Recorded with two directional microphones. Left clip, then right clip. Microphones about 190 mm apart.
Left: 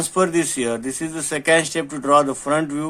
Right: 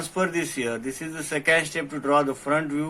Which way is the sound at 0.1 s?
40° left (ahead or behind).